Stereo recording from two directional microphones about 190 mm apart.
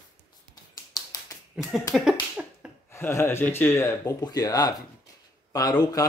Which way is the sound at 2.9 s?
15° left (ahead or behind).